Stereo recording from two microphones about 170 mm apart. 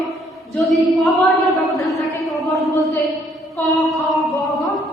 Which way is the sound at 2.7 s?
20° left (ahead or behind).